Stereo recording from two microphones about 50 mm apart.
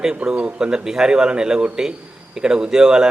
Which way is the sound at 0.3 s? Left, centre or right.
Centre.